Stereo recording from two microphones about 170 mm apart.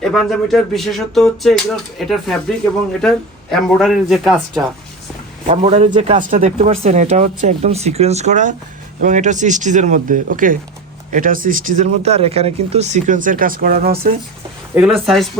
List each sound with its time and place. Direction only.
0.0 s speech: 5° left (ahead or behind)
5.5 s speech: 35° right (ahead or behind); by 14.1 s 65° right (ahead or behind)
14.8 s speech: centre (ahead or behind)